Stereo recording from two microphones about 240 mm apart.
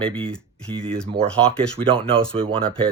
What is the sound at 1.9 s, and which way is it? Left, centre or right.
Speech, right.